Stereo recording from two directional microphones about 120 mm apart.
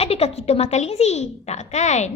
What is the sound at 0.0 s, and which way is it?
A child's voice, 60° left (ahead or behind).